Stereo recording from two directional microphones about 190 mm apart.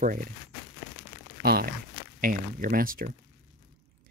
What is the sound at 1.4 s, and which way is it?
Speech, 55° right (ahead or behind).